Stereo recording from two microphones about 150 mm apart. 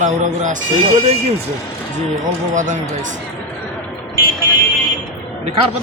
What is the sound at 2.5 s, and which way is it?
Speech, 55° right (ahead or behind).